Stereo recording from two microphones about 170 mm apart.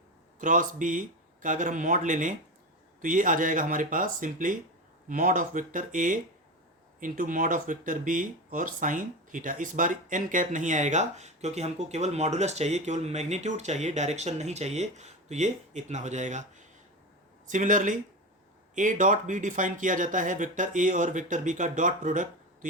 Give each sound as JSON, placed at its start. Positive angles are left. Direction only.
{"t": 0.3, "sound": "speech", "side_deg": -50}